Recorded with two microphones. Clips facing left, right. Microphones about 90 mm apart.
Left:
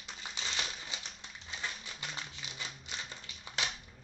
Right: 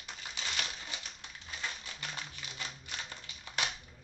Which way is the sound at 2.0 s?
20° left (ahead or behind).